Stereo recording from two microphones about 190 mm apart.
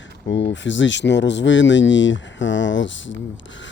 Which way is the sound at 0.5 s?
75° left (ahead or behind).